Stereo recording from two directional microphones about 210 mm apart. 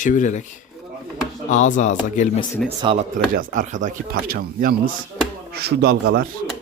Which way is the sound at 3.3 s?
40° right (ahead or behind).